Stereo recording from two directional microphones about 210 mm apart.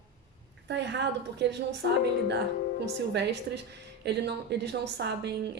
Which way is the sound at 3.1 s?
55° right (ahead or behind).